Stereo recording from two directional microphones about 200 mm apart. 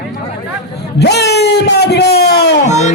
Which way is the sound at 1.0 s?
55° left (ahead or behind).